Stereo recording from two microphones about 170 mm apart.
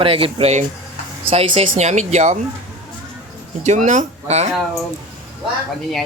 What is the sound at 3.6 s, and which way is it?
Speech, 45° right (ahead or behind).